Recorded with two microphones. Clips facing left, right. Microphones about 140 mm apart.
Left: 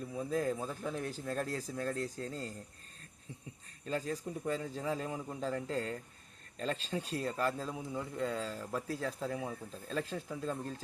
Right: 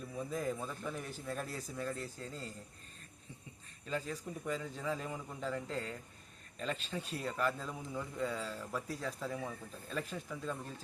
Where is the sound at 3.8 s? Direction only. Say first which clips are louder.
Left 3 dB; 35° left (ahead or behind).